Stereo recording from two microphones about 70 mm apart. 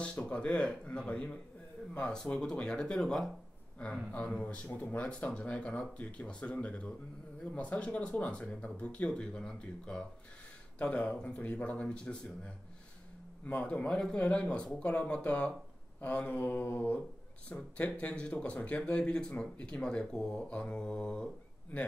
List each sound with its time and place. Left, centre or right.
0.0 s speech: centre
16.0 s mantra: centre
17.5 s speech: centre
21.7 s mantra: centre